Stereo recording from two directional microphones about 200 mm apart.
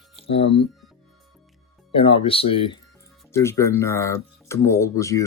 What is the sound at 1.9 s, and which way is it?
Speech, 25° left (ahead or behind).